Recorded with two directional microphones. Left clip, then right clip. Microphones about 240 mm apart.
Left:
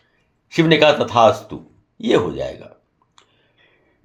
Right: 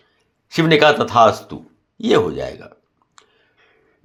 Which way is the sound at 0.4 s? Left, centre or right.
Centre.